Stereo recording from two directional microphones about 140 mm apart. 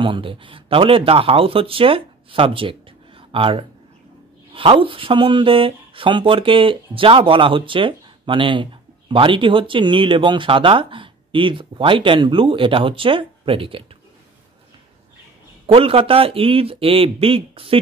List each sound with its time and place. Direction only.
0.0 s speech: 40° right (ahead or behind)
15.6 s speech: 40° right (ahead or behind)